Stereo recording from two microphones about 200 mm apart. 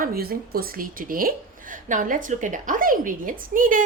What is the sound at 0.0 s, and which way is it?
Speech, 50° right (ahead or behind).